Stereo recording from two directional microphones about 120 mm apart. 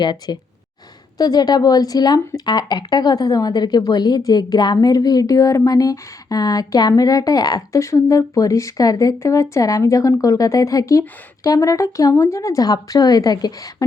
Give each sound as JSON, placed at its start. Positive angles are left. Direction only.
{"t": 0.0, "sound": "speech", "side_deg": 35}